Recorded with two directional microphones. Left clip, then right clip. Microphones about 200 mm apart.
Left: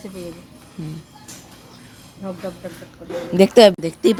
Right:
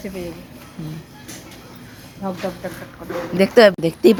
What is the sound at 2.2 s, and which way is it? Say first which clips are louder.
Speech: right 4 dB; 5° left (ahead or behind).